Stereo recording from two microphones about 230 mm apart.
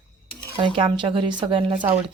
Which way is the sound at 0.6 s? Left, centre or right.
Right.